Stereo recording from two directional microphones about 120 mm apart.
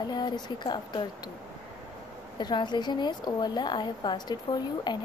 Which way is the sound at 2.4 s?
40° left (ahead or behind).